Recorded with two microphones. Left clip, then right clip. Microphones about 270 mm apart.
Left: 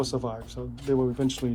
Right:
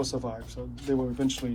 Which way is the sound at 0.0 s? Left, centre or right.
Centre.